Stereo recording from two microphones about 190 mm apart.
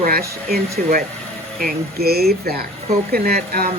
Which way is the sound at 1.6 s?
55° right (ahead or behind).